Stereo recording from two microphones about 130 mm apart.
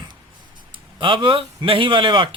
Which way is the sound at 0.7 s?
40° right (ahead or behind).